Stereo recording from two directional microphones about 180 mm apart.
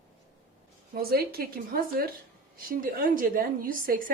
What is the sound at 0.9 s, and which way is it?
A woman's voice, 55° right (ahead or behind).